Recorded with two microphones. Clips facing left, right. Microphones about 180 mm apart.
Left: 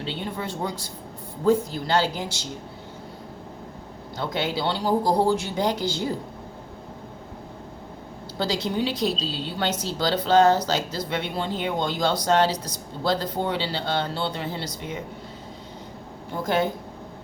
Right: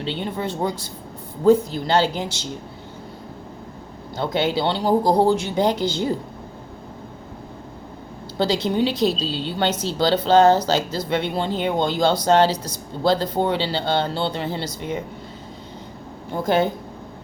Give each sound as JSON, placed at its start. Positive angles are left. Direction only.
{"t": 0.0, "sound": "speech", "side_deg": -25}
{"t": 4.2, "sound": "speech", "side_deg": -25}
{"t": 8.4, "sound": "speech", "side_deg": -25}
{"t": 16.3, "sound": "speech", "side_deg": -25}